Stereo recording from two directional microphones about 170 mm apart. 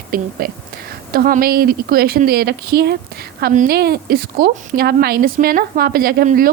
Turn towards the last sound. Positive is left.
turn(degrees=-60)  # may be behind; listen again after turning